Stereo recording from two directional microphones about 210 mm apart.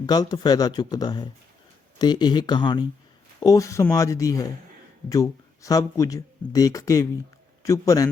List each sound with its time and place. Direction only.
0.0 s speech: 20° left (ahead or behind)